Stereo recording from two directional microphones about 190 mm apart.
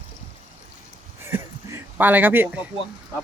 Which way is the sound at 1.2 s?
10° right (ahead or behind).